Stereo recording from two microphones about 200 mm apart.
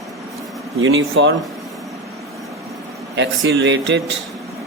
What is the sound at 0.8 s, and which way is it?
Speech, 75° right (ahead or behind).